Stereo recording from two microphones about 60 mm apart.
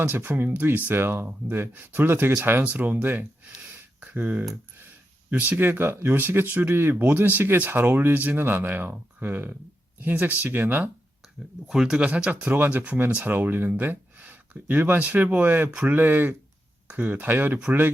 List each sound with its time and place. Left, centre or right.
0.0 s speech: right
0.9 s speech: right
11.7 s speech: centre; by 17.6 s right